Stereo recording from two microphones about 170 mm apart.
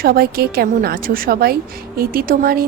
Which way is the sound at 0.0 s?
65° right (ahead or behind).